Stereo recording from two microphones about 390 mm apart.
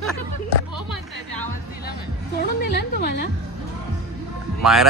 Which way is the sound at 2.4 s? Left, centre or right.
Left.